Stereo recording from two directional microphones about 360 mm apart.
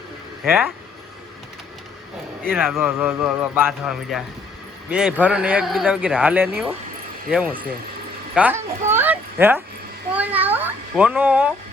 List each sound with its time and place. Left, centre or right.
0.4 s speech: centre
2.4 s speech: centre